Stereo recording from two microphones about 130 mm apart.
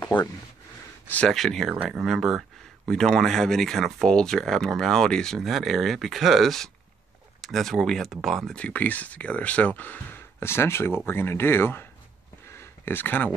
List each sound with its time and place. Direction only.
0.0 s speech: 30° left (ahead or behind)
1.0 s speech: 10° left (ahead or behind)
1.3 s speech: centre (ahead or behind); by 11.9 s 15° left (ahead or behind)
12.4 s a sound: 20° left (ahead or behind)